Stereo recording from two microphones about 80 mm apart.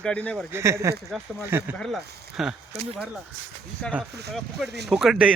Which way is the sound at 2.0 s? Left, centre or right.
Centre.